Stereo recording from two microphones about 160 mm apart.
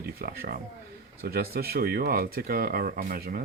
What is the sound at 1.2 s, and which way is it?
Speech, 70° right (ahead or behind).